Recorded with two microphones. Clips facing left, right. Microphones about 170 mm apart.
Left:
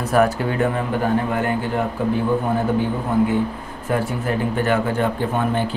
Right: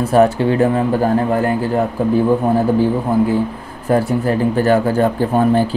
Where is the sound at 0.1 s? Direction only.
30° right (ahead or behind).